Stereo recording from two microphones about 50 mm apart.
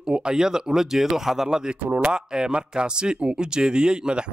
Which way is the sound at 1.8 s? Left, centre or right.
Right.